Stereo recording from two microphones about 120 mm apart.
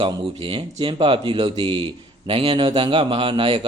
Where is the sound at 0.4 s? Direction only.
45° right (ahead or behind).